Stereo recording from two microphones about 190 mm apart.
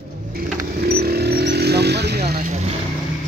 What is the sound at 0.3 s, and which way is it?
Vehicle, 55° right (ahead or behind).